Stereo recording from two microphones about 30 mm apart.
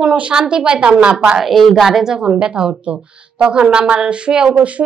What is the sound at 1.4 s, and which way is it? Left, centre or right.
Speech, centre.